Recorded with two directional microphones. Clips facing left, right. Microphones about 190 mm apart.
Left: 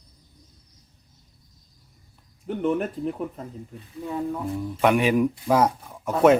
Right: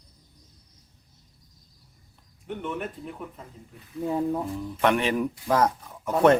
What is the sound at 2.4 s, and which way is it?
Speech, 40° left (ahead or behind).